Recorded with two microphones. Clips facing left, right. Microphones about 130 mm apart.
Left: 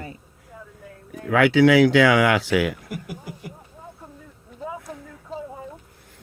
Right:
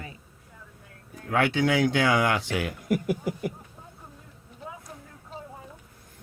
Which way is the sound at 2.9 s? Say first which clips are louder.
Right 8 dB; 65° right (ahead or behind).